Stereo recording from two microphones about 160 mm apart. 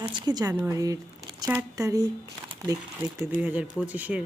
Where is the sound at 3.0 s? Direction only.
10° right (ahead or behind).